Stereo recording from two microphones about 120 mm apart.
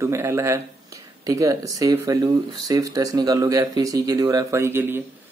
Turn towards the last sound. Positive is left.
turn(degrees=-20)  # may be behind; listen again after turning